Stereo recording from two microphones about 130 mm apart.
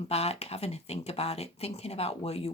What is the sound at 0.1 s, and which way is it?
Speech, 55° left (ahead or behind).